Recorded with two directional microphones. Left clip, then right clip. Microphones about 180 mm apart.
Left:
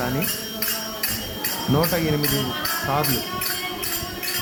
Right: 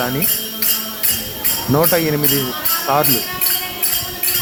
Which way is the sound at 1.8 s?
30° right (ahead or behind).